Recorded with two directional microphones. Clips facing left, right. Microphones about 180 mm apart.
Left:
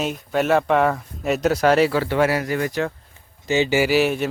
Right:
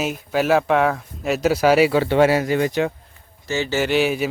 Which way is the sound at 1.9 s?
25° right (ahead or behind).